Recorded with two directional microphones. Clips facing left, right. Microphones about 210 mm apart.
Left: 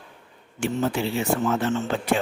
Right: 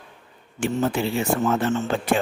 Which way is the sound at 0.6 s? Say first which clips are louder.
Right 2 dB; 50° right (ahead or behind).